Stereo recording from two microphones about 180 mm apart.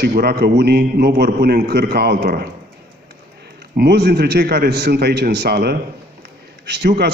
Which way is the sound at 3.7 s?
65° right (ahead or behind).